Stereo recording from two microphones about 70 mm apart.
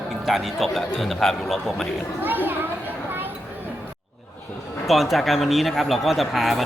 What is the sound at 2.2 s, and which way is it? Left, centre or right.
Children playing, right.